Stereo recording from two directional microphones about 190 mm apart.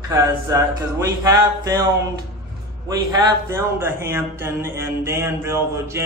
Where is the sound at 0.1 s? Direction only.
15° right (ahead or behind).